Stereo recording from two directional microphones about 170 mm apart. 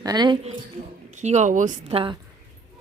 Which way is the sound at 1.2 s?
45° right (ahead or behind).